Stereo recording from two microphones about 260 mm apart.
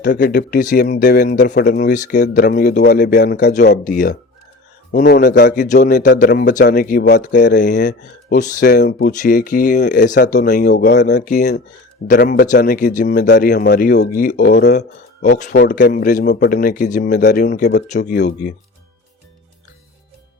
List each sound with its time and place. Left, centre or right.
0.0 s speech: left
11.3 s speech: left